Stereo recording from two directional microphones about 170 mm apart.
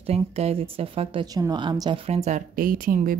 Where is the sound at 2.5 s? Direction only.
55° right (ahead or behind).